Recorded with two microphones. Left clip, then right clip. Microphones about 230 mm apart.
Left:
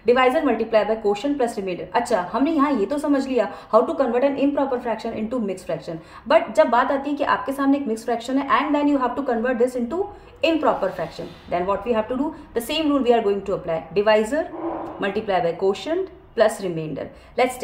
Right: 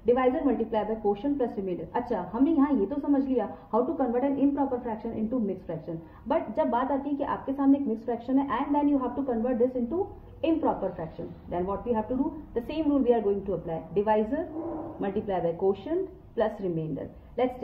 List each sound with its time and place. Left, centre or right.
0.0 s a woman's voice: left